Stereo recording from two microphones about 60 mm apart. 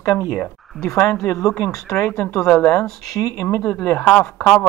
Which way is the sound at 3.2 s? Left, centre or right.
Left.